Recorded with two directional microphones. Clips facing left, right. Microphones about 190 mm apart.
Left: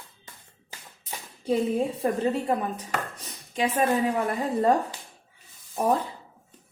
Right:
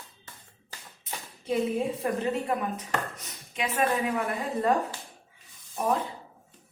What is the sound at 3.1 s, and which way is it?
Chopping, 35° left (ahead or behind).